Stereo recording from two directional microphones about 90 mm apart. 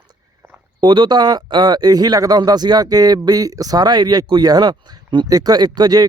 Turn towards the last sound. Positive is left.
turn(degrees=-50)  # may be behind; listen again after turning